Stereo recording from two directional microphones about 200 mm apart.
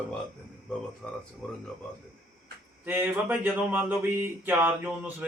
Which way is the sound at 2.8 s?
10° right (ahead or behind).